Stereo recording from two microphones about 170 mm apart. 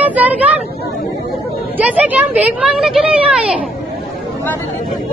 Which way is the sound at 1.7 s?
10° right (ahead or behind).